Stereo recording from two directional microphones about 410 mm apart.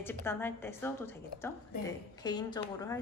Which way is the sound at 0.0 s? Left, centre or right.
Centre.